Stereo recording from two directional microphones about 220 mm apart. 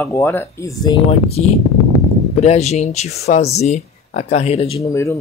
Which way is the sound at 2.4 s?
30° left (ahead or behind).